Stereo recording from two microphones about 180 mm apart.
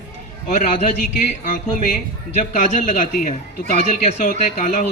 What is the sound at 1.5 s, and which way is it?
A man's voice, 45° left (ahead or behind).